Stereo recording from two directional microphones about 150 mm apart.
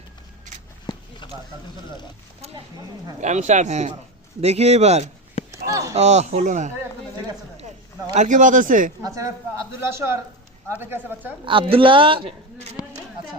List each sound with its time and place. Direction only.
1.2 s a sound: 30° left (ahead or behind)
3.2 s a man's voice: 50° right (ahead or behind)
5.5 s speech: 20° right (ahead or behind)
6.0 s a man's voice: 50° right (ahead or behind)
8.1 s speech: 55° right (ahead or behind)
9.0 s speech: 20° right (ahead or behind)
11.4 s a woman's voice: 35° right (ahead or behind)